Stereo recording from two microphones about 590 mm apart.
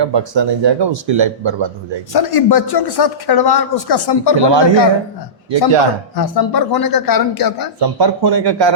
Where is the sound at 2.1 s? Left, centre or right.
Left.